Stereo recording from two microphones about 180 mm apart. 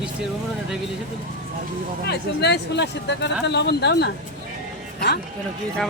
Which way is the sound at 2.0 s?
65° left (ahead or behind).